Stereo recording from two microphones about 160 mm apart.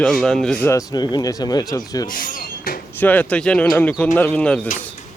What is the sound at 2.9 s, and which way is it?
Speech, 10° left (ahead or behind).